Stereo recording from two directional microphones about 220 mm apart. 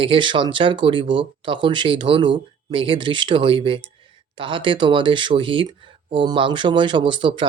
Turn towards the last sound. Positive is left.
turn(degrees=-20)  # may be behind; listen again after turning